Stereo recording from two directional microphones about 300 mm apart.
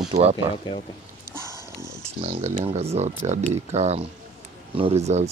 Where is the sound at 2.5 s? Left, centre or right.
Centre.